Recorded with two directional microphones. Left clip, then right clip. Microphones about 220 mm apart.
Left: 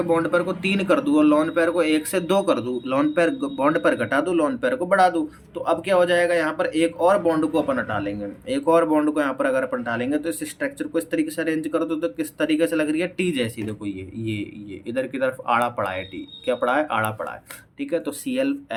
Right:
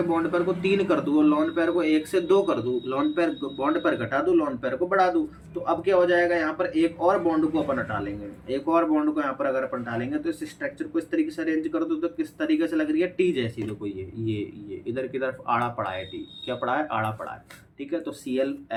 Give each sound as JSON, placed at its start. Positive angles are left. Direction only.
{"t": 0.1, "sound": "speech", "side_deg": 50}